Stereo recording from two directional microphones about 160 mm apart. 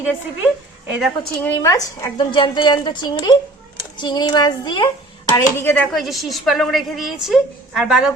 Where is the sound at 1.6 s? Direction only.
20° left (ahead or behind).